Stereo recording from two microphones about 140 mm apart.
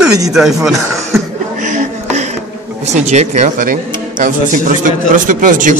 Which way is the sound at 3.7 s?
70° right (ahead or behind).